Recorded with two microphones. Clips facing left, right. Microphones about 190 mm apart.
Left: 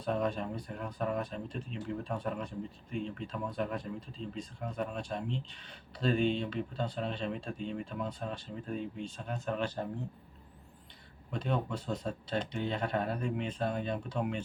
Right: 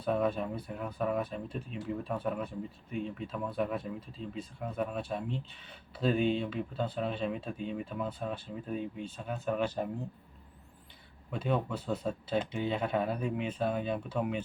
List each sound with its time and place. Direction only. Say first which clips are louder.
0.0 s speech: right 2 dB; 5° right (ahead or behind)
11.3 s speech: right 2 dB; 5° right (ahead or behind)